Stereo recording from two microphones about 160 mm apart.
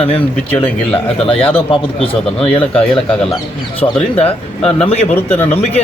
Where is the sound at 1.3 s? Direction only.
35° left (ahead or behind).